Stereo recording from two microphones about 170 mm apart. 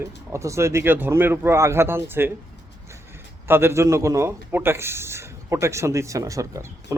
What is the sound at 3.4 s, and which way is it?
Speech, 15° right (ahead or behind).